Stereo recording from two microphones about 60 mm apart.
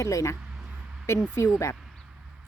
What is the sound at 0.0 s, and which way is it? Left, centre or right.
Speech, left.